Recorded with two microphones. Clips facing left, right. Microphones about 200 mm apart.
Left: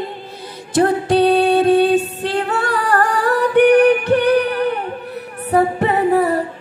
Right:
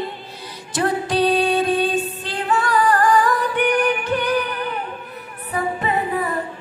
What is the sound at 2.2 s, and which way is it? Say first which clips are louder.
Singing: left 3 dB; 60° left (ahead or behind).